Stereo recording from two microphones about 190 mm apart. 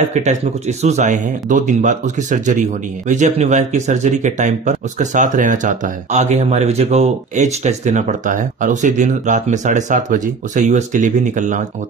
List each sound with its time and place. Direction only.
0.1 s speech: 40° right (ahead or behind)